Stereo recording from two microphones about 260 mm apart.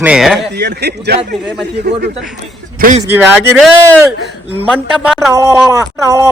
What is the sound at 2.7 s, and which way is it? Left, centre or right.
Speech, right.